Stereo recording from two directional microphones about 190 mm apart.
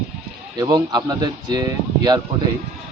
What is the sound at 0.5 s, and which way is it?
Speech, 20° right (ahead or behind).